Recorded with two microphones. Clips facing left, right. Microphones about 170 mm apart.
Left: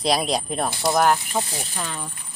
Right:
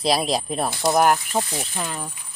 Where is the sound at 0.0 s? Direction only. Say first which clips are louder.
Right 1 dB; centre (ahead or behind).